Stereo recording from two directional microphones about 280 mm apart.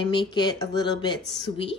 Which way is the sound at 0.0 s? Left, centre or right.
Centre.